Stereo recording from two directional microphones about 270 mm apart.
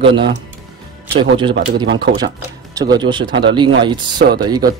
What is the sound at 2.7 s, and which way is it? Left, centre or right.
Speech, centre.